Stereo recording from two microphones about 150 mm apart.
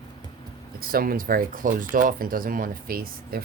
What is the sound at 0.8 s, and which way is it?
Speech, 75° right (ahead or behind).